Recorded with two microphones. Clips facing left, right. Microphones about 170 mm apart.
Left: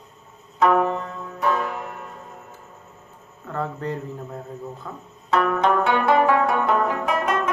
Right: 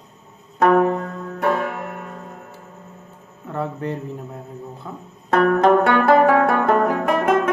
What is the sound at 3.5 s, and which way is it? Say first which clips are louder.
Speech: right 2 dB; 20° right (ahead or behind).